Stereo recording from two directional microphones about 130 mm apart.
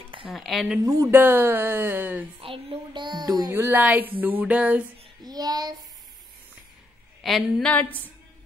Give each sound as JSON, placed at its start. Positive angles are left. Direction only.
{"t": 0.0, "sound": "a sound", "side_deg": -40}
{"t": 0.3, "sound": "speech", "side_deg": 0}
{"t": 0.8, "sound": "a woman's voice", "side_deg": -20}
{"t": 2.4, "sound": "speech", "side_deg": -45}
{"t": 3.5, "sound": "a woman's voice", "side_deg": -15}
{"t": 5.2, "sound": "child singing", "side_deg": -30}
{"t": 7.2, "sound": "speech", "side_deg": 0}